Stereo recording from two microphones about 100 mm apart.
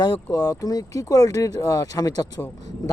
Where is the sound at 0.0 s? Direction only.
40° left (ahead or behind).